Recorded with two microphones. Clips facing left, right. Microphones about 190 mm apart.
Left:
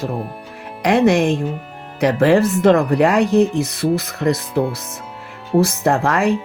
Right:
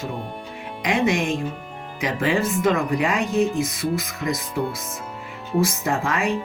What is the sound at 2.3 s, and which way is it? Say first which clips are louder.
Speech: left 7 dB; 65° left (ahead or behind).